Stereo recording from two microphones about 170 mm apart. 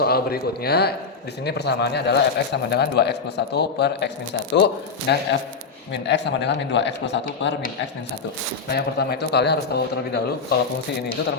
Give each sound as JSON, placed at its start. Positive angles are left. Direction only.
{"t": 0.0, "sound": "a man's voice", "side_deg": 65}
{"t": 8.7, "sound": "a man's voice", "side_deg": 70}